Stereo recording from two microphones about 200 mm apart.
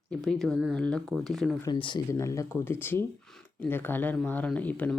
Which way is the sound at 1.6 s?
20° left (ahead or behind).